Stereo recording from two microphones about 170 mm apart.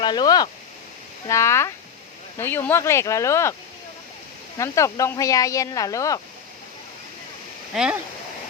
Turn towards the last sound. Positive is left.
turn(degrees=-5)  # may be behind; listen again after turning